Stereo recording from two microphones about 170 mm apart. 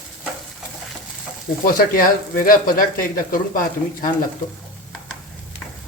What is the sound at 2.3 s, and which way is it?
Speech, 55° left (ahead or behind).